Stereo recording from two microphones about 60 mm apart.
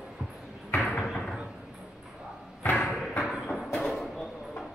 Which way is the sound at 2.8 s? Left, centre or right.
Centre.